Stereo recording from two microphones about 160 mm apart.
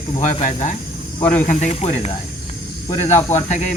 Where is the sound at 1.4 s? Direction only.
45° left (ahead or behind).